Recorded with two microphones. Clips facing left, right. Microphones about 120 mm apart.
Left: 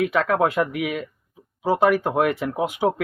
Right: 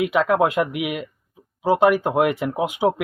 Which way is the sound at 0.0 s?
15° right (ahead or behind).